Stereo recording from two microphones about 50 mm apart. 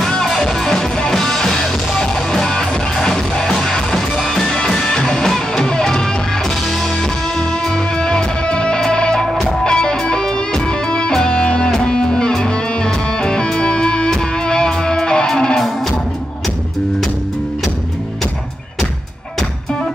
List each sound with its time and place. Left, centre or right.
0.0 s music: centre
7.3 s music: centre